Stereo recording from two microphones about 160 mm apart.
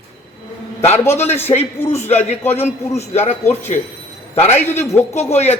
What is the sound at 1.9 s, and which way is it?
A man's voice, 40° left (ahead or behind).